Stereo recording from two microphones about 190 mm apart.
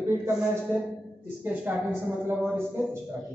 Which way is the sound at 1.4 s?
10° right (ahead or behind).